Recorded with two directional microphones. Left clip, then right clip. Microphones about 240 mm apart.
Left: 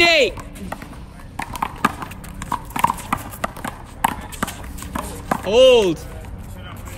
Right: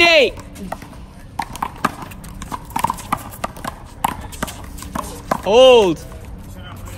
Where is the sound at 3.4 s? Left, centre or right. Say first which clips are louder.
Even; centre.